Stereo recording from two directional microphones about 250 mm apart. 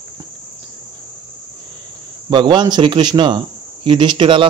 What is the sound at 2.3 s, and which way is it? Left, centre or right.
Speech, centre.